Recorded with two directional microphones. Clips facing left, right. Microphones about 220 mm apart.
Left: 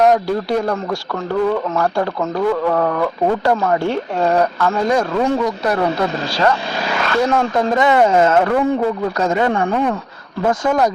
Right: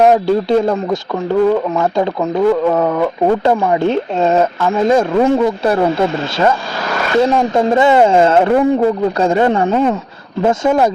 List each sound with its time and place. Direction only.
0.0 s speech: 25° right (ahead or behind)
7.1 s speech: 15° right (ahead or behind)